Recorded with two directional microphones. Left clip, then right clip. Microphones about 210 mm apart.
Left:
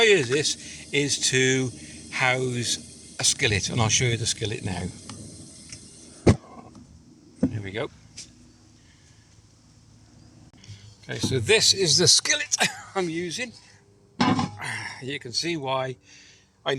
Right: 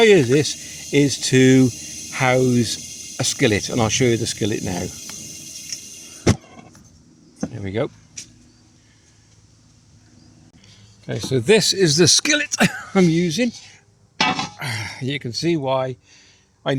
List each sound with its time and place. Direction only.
0.0 s speech: 30° right (ahead or behind)
6.4 s a sound: 45° right (ahead or behind)
7.5 s a sound: 35° right (ahead or behind)
10.6 s speech: 25° right (ahead or behind); by 13.5 s 50° right (ahead or behind)
14.6 s speech: 50° right (ahead or behind); by 16.3 s 20° right (ahead or behind)
16.7 s speech: 35° right (ahead or behind)